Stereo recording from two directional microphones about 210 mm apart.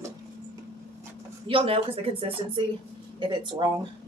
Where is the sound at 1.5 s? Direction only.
25° right (ahead or behind).